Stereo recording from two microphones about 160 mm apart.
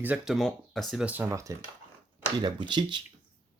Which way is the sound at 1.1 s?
10° right (ahead or behind).